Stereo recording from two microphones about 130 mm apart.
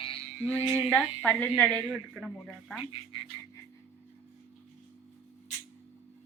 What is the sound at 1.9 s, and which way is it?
Speech, 5° left (ahead or behind).